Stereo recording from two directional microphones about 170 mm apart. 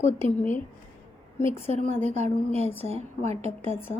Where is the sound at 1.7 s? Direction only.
40° right (ahead or behind).